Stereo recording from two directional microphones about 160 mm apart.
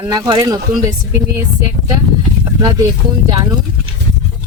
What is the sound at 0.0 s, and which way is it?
Speech, 30° right (ahead or behind).